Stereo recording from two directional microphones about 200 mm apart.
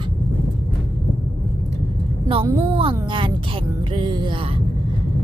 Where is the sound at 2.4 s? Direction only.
25° right (ahead or behind).